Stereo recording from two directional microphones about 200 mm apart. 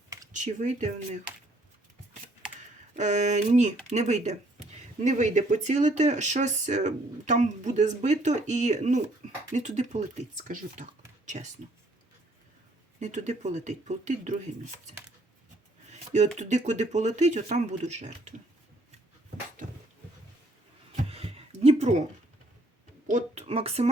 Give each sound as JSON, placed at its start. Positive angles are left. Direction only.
{"t": 0.3, "sound": "speech", "side_deg": -35}
{"t": 2.9, "sound": "speech", "side_deg": -35}
{"t": 13.0, "sound": "speech", "side_deg": -35}
{"t": 20.9, "sound": "a sound", "side_deg": -30}
{"t": 23.0, "sound": "speech", "side_deg": -35}